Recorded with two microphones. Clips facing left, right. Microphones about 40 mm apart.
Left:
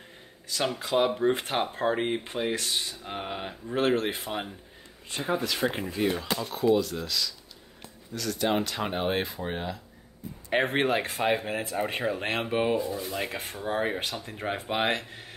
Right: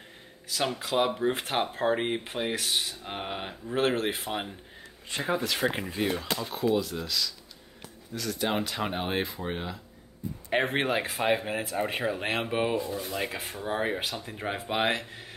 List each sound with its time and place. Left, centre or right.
0.5 s speech: centre
5.2 s speech: right
5.7 s speech: centre